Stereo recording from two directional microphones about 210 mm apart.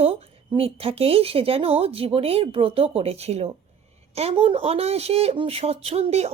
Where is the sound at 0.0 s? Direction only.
25° right (ahead or behind).